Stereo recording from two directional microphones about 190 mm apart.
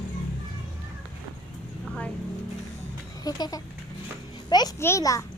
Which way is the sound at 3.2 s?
20° left (ahead or behind).